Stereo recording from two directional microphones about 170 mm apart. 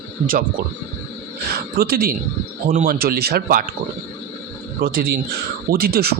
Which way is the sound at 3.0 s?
65° right (ahead or behind).